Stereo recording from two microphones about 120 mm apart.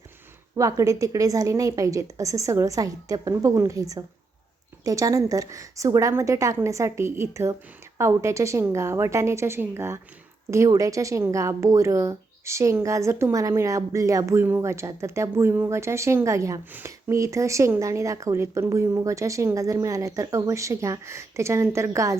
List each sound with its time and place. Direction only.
0.5 s speech: 30° right (ahead or behind)